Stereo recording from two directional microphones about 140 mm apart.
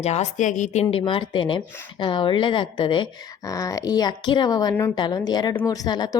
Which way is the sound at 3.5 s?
25° left (ahead or behind).